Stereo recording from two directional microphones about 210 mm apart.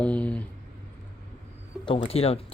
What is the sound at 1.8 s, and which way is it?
Speech, 25° left (ahead or behind).